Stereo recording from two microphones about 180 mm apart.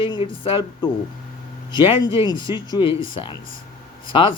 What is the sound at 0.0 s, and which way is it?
Speech, 25° left (ahead or behind).